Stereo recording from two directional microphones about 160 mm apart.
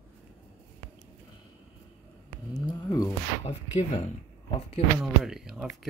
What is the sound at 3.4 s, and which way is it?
Speech, 40° left (ahead or behind).